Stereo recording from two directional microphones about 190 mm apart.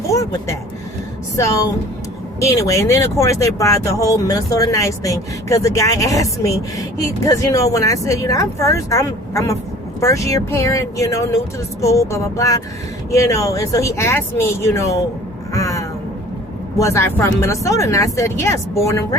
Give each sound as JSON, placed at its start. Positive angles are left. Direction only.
{"t": 2.4, "sound": "speech", "side_deg": 15}
{"t": 15.5, "sound": "a sound", "side_deg": 15}
{"t": 16.7, "sound": "speech", "side_deg": 15}